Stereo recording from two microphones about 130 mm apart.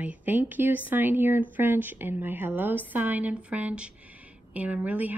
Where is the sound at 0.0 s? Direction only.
10° right (ahead or behind).